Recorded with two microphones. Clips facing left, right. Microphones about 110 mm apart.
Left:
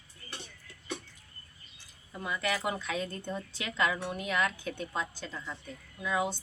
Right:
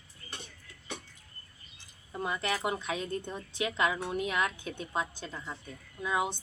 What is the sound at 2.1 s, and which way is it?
A woman's voice, 30° right (ahead or behind).